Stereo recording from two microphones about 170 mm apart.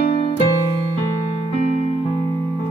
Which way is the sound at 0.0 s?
35° left (ahead or behind).